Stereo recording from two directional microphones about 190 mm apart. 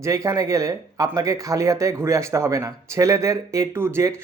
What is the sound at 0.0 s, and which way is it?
Speech, 15° right (ahead or behind).